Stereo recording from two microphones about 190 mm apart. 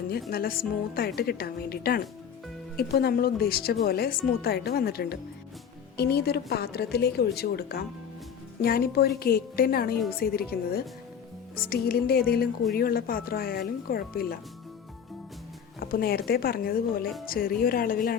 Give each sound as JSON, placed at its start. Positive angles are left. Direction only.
{"t": 0.3, "sound": "a woman's voice", "side_deg": 50}
{"t": 11.6, "sound": "a woman's voice", "side_deg": 50}
{"t": 15.8, "sound": "a woman's voice", "side_deg": 50}